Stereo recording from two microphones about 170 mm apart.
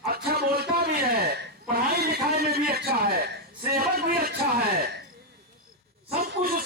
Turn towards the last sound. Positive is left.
turn(degrees=-60)  # may be behind; listen again after turning